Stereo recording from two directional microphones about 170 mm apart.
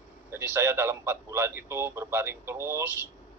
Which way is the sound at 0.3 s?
15° right (ahead or behind).